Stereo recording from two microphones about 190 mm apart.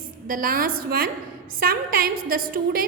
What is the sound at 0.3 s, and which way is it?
A woman's voice, 50° right (ahead or behind).